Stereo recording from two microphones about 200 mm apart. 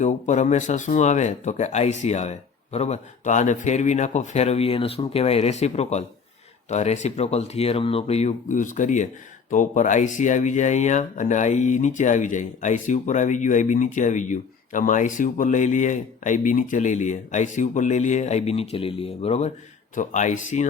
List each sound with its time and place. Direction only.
0.0 s speech: 35° left (ahead or behind)